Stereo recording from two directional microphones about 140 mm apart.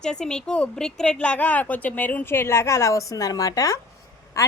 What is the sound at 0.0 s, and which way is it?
A woman's voice, 5° left (ahead or behind).